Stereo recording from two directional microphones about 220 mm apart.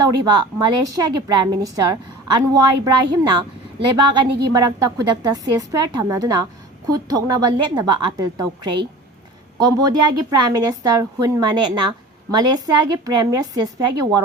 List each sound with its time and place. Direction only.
0.3 s a woman's voice: 20° right (ahead or behind)